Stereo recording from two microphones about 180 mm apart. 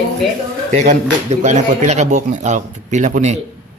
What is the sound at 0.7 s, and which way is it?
A man's voice, 40° right (ahead or behind).